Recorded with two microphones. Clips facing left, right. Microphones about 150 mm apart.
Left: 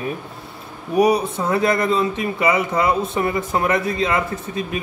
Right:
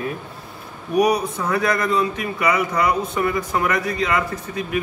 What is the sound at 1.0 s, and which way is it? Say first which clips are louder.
Speech: left 2 dB; 25° left (ahead or behind).